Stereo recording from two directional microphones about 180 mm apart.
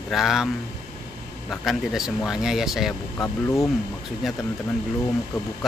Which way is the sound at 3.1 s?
15° left (ahead or behind).